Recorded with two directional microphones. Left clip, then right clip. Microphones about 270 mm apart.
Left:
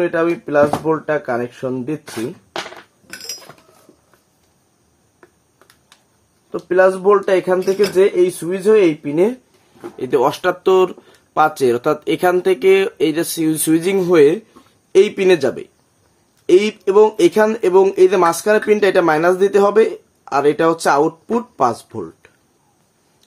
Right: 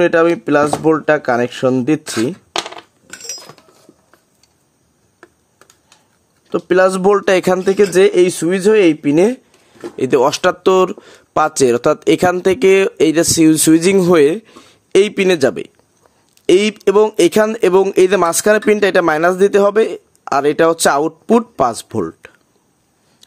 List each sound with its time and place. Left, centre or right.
0.0 s speech: right
6.5 s speech: right